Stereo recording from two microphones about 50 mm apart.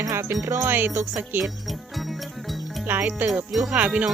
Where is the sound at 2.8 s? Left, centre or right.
Right.